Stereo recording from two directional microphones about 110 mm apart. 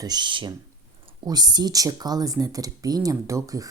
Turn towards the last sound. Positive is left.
turn(degrees=-30)  # may be behind; listen again after turning